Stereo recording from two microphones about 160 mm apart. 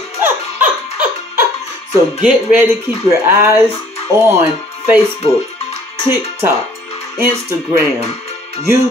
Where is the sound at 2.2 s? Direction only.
15° right (ahead or behind).